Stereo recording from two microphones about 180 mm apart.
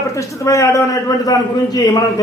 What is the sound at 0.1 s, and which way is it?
A man's voice, 15° left (ahead or behind).